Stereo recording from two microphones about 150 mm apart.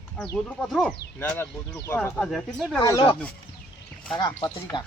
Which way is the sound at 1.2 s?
15° left (ahead or behind).